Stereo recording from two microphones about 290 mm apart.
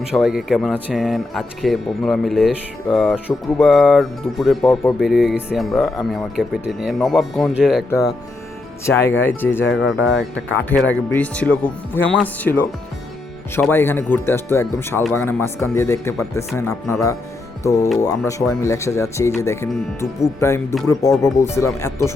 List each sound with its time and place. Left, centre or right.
0.0 s speech: centre
7.9 s speech: centre
10.0 s speech: left
11.1 s speech: centre